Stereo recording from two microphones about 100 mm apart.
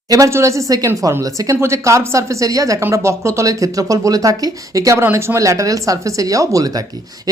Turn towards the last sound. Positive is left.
turn(degrees=-35)  # may be behind; listen again after turning